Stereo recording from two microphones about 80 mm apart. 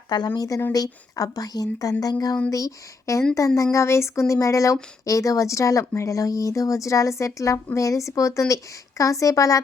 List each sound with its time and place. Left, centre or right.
0.3 s speech: left